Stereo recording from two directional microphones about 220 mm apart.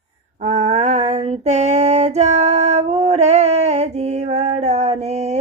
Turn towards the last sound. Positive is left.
turn(degrees=-30)  # may be behind; listen again after turning